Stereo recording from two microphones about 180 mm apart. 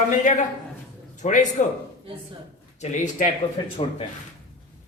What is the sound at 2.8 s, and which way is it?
Speech, 40° left (ahead or behind).